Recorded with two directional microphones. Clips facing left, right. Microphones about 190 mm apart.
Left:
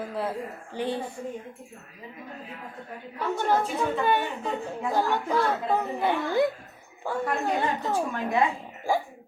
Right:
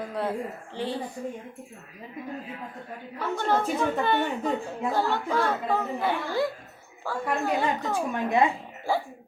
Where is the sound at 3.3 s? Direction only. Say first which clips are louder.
Even; 10° left (ahead or behind).